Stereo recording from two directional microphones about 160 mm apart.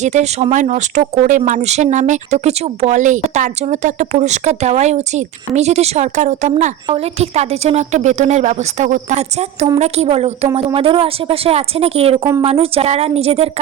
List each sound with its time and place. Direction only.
0.0 s speech: 45° right (ahead or behind)